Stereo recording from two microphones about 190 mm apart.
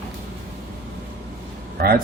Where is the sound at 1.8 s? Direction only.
50° right (ahead or behind).